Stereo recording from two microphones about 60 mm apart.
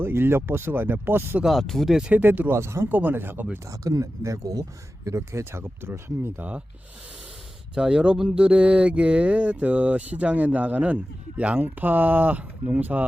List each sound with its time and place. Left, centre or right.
0.0 s speech: right
1.6 s speech: centre
1.9 s speech: centre
2.1 s speech: right
2.5 s speech: right
2.9 s speech: right
3.7 s speech: right
5.0 s speech: right
7.8 s speech: centre